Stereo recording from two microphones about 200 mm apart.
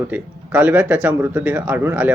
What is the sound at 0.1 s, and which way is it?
Speech, 10° right (ahead or behind).